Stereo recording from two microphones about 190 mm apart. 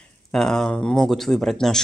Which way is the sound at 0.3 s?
Centre (ahead or behind).